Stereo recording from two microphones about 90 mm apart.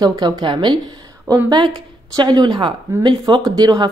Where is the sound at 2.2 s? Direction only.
55° right (ahead or behind).